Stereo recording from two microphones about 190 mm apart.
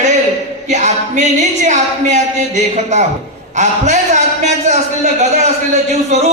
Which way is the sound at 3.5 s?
40° right (ahead or behind).